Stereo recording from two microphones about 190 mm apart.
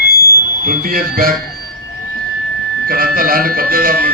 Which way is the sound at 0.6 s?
50° right (ahead or behind).